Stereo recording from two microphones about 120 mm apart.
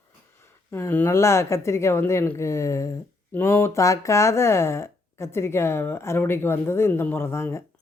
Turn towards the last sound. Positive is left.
turn(degrees=20)  # may be behind; listen again after turning